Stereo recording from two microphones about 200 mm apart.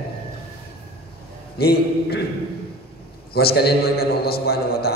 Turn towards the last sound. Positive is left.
turn(degrees=50)  # may be behind; listen again after turning